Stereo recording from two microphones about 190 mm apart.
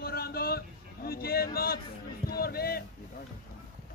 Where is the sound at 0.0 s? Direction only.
55° left (ahead or behind).